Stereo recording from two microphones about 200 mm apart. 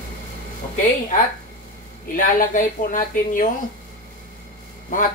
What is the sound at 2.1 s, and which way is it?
A woman's voice, 45° left (ahead or behind).